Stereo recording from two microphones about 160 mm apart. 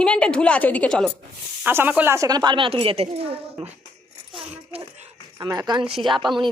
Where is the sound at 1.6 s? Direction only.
10° right (ahead or behind); by 3.4 s 35° right (ahead or behind).